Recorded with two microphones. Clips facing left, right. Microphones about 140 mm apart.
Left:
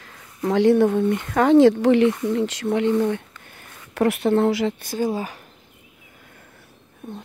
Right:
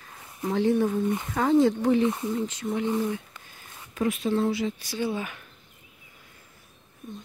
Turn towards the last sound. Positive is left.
turn(degrees=70)  # may be behind; listen again after turning